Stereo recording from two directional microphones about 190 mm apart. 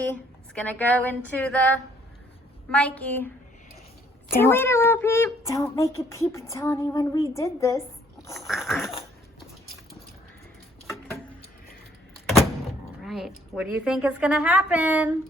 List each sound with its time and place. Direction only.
0.0 s a woman's voice: 10° left (ahead or behind)
4.4 s a woman's voice: 10° left (ahead or behind)
8.4 s a woman's voice: centre (ahead or behind)
10.8 s a sound: 15° left (ahead or behind)
13.0 s a woman's voice: centre (ahead or behind)